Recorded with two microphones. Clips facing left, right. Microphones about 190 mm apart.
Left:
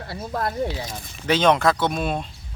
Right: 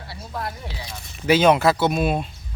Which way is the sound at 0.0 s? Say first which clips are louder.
Left 5 dB; 50° left (ahead or behind).